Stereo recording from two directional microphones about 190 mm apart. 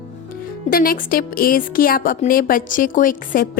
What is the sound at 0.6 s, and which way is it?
A woman's voice, 50° left (ahead or behind).